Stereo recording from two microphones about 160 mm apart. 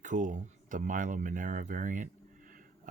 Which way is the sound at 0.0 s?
50° right (ahead or behind).